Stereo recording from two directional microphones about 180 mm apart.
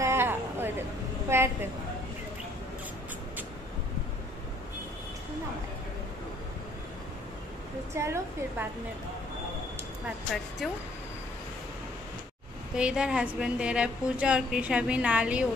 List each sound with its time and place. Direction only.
0.0 s a sound: 15° right (ahead or behind)
1.3 s a woman's voice: 15° right (ahead or behind)
7.9 s a woman's voice: 15° right (ahead or behind)
10.0 s a woman's voice: centre (ahead or behind)
12.7 s a woman's voice: 5° right (ahead or behind)